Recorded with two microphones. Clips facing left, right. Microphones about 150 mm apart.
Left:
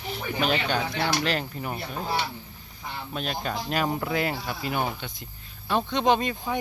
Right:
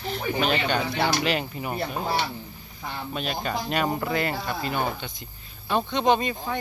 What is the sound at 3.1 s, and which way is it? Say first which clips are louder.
Speech: right 1 dB; centre (ahead or behind).